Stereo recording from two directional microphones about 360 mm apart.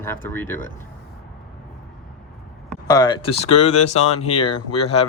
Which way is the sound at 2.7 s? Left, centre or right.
Centre.